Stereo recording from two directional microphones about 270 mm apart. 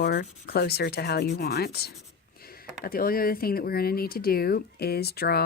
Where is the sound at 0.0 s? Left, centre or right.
Left.